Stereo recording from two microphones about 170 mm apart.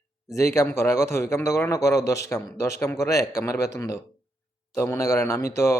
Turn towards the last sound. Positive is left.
turn(degrees=15)  # may be behind; listen again after turning